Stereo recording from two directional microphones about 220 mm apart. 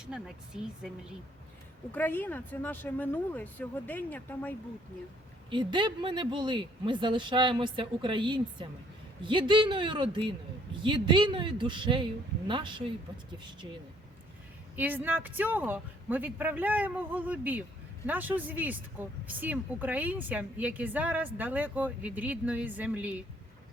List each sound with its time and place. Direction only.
0.0 s speech: 5° right (ahead or behind)
1.9 s speech: 10° left (ahead or behind)
5.5 s speech: 20° right (ahead or behind)
14.8 s speech: 10° right (ahead or behind)